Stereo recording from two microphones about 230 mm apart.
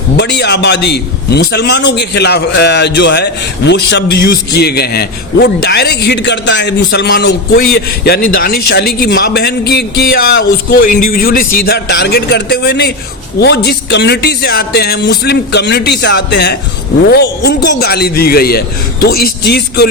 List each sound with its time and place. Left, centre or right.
0.2 s a man's voice: left